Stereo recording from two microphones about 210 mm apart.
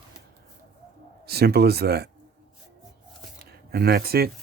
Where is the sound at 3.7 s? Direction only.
50° right (ahead or behind).